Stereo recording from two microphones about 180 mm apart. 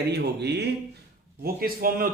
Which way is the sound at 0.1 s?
70° right (ahead or behind).